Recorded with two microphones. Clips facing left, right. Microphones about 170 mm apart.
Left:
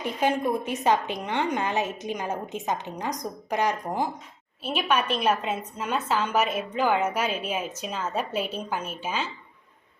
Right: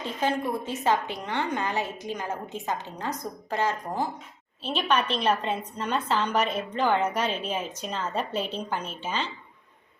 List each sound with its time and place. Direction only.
0.0 s a woman's voice: 15° left (ahead or behind)